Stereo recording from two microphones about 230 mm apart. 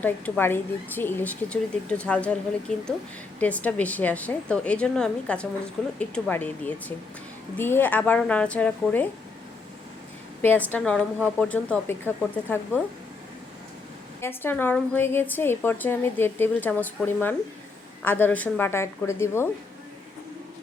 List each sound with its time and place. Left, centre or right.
0.0 s a woman's voice: centre
10.7 s a woman's voice: centre
14.2 s a woman's voice: centre